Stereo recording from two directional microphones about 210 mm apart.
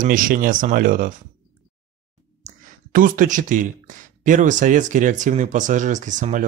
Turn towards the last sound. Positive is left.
turn(degrees=-35)  # may be behind; listen again after turning